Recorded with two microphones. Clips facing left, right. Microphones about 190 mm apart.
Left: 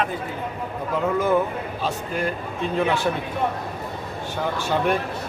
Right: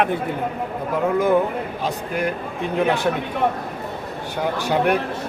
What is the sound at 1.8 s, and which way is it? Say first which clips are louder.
Speech: right 1 dB; 15° right (ahead or behind).